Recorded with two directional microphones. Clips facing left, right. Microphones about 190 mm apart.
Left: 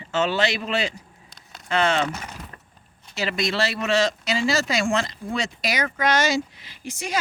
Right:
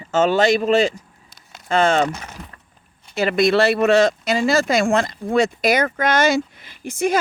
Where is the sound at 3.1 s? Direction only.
55° right (ahead or behind).